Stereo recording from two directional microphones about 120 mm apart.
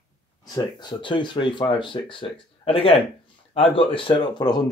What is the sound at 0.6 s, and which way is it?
Speech, 35° left (ahead or behind).